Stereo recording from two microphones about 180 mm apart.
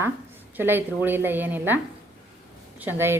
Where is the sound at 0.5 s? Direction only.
10° right (ahead or behind).